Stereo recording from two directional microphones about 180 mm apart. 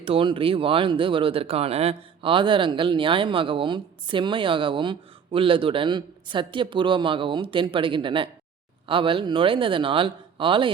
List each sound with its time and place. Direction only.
0.0 s speech: 30° right (ahead or behind)